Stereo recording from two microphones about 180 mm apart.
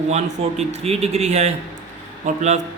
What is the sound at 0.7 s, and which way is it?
A man's voice, 35° right (ahead or behind).